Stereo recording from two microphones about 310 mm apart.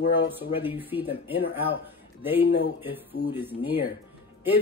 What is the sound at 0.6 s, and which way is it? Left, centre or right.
A man's voice, centre.